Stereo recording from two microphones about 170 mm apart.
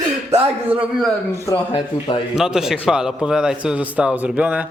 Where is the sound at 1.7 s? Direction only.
30° left (ahead or behind).